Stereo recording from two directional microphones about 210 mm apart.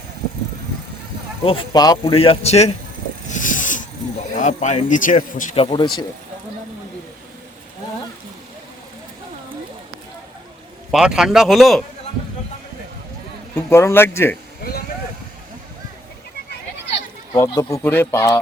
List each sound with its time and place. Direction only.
1.5 s speech: 20° left (ahead or behind)
3.2 s vehicle: 35° left (ahead or behind)
4.4 s speech: 35° left (ahead or behind)
10.9 s speech: 5° right (ahead or behind)
13.6 s speech: 10° left (ahead or behind)
16.9 s speech: 20° left (ahead or behind)